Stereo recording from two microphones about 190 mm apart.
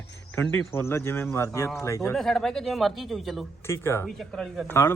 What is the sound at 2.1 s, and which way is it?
Speech, centre (ahead or behind).